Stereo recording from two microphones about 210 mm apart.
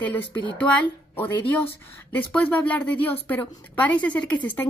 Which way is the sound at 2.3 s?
5° left (ahead or behind).